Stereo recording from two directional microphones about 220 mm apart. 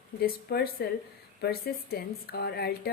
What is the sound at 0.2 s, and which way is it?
Speech, 45° left (ahead or behind).